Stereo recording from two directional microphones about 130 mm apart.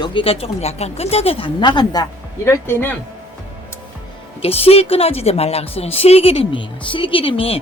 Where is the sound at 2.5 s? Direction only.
15° left (ahead or behind).